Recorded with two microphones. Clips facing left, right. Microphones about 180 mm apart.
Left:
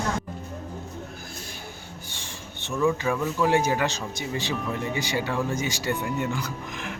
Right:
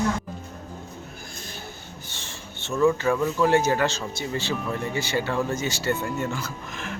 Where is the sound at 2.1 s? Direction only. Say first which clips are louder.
Even; 15° left (ahead or behind).